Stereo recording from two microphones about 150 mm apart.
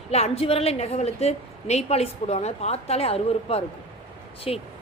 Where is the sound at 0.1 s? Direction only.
40° left (ahead or behind).